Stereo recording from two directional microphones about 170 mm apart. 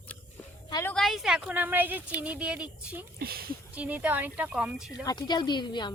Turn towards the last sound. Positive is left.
turn(degrees=25)  # may be behind; listen again after turning